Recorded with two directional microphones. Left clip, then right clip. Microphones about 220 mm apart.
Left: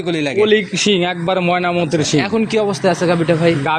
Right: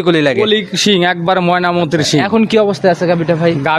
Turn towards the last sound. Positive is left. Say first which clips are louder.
# right 2 dB
turn(degrees=-35)  # may be behind; listen again after turning